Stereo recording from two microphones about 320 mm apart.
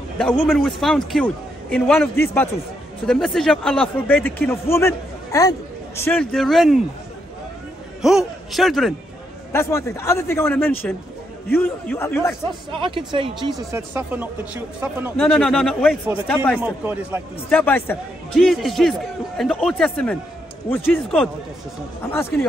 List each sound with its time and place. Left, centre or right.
0.2 s speech: centre
8.0 s a man's voice: centre
12.8 s speech: centre
17.5 s a man's voice: centre